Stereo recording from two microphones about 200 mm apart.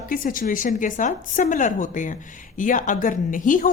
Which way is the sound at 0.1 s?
45° left (ahead or behind).